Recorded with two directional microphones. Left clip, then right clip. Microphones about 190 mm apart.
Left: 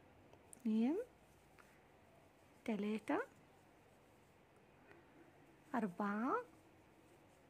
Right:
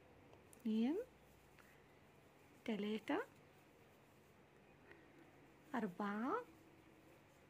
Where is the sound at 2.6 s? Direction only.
20° left (ahead or behind).